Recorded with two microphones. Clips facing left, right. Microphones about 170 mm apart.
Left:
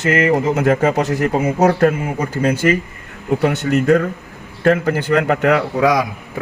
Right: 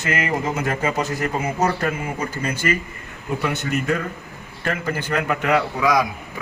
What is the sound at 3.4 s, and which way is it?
A man's voice, 70° left (ahead or behind).